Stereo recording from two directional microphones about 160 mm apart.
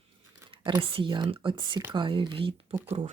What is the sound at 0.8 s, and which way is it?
Speech, 35° right (ahead or behind).